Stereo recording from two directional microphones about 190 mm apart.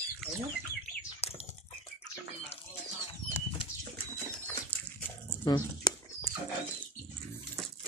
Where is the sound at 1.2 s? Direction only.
35° left (ahead or behind).